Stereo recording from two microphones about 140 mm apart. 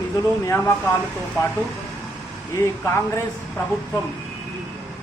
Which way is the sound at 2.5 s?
20° left (ahead or behind).